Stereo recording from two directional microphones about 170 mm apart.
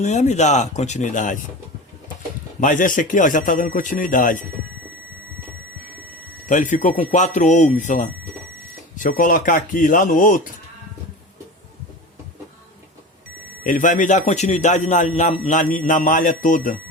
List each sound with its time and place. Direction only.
0.0 s a man's voice: 45° left (ahead or behind)
2.6 s a man's voice: 50° left (ahead or behind)
6.5 s a man's voice: 50° left (ahead or behind)
13.7 s a man's voice: 50° left (ahead or behind)